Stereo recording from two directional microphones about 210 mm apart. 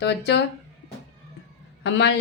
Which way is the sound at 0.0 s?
55° left (ahead or behind).